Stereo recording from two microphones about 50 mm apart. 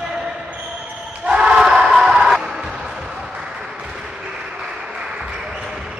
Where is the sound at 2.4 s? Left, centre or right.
Centre.